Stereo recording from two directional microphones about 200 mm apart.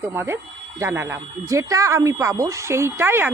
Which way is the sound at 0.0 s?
10° right (ahead or behind).